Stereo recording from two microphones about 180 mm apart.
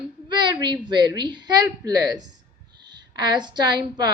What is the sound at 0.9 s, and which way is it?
A woman's voice, 25° right (ahead or behind).